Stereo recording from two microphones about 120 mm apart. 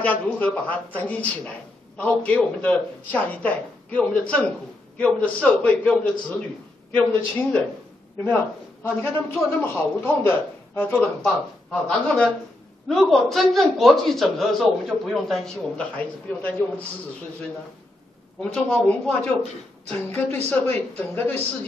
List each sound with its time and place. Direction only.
0.0 s a woman's voice: 10° left (ahead or behind)
18.4 s speech: 10° left (ahead or behind)